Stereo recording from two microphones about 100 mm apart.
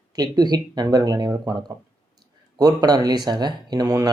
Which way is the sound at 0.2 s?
40° right (ahead or behind).